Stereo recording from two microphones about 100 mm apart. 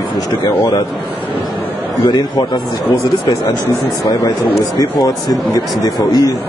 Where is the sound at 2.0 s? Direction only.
45° left (ahead or behind).